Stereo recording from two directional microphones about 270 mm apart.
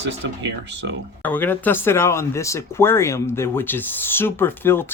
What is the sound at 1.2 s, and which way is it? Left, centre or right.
Speech, centre.